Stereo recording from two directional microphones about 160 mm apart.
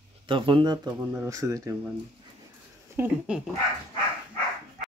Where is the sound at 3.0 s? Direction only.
15° right (ahead or behind).